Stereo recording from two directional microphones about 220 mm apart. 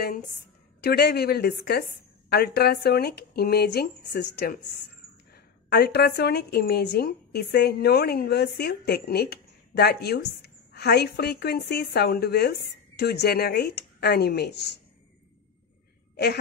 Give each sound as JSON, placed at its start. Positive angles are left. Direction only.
{"t": 0.0, "sound": "a woman's voice", "side_deg": 45}